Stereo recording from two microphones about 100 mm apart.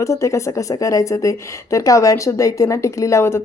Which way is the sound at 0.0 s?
30° left (ahead or behind).